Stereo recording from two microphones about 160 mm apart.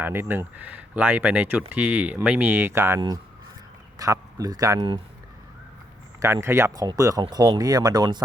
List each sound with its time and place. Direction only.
0.0 s speech: 15° right (ahead or behind)
6.1 s speech: 15° right (ahead or behind)